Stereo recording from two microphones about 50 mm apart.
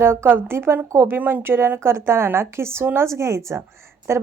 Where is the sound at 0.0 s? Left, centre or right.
Right.